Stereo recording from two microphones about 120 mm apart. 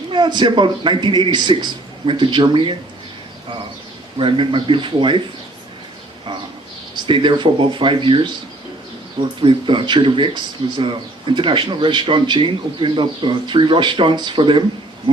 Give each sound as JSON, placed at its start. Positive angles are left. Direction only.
{"t": 0.1, "sound": "speech", "side_deg": -40}
{"t": 4.2, "sound": "speech", "side_deg": -45}
{"t": 7.1, "sound": "speech", "side_deg": -40}
{"t": 9.4, "sound": "speech", "side_deg": -45}